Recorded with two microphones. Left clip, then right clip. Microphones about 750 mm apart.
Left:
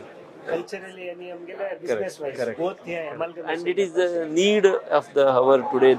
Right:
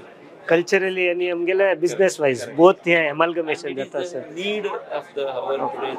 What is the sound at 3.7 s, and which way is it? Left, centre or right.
Speech, left.